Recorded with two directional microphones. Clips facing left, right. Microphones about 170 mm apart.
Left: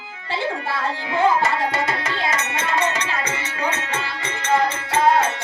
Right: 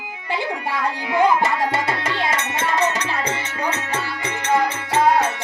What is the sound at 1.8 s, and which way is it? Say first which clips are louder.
Music: right 1 dB; 30° right (ahead or behind).